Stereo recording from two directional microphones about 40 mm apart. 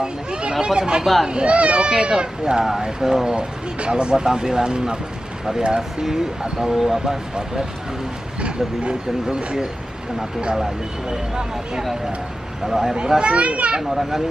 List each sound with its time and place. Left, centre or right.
0.0 s speech: right
2.6 s speech: centre
3.3 s speech: right
6.7 s speech: centre
8.4 s speech: right
12.6 s speech: centre
13.2 s speech: right
13.8 s speech: centre